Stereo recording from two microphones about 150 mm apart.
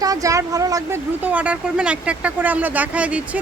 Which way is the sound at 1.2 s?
10° right (ahead or behind).